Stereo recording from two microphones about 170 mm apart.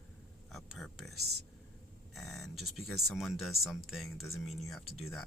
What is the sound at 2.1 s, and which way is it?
Speech, centre (ahead or behind).